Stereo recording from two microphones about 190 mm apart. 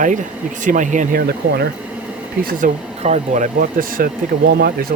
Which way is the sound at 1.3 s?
60° right (ahead or behind).